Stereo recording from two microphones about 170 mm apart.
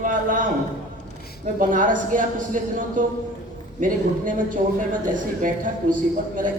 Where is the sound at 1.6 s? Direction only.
50° right (ahead or behind).